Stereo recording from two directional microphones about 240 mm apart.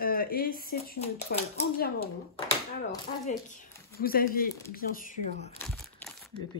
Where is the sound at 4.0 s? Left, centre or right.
Left.